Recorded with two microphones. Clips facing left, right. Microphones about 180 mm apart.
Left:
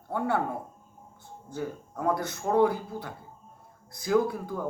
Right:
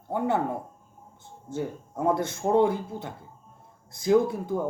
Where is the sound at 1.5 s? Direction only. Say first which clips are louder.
Right 3 dB; 25° right (ahead or behind).